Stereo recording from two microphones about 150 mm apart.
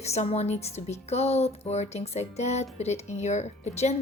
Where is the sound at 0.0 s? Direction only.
45° left (ahead or behind).